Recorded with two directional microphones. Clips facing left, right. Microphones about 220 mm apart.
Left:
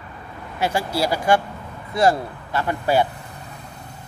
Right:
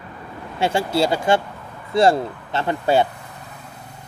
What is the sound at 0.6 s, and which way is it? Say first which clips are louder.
Speech: right 3 dB; 25° right (ahead or behind).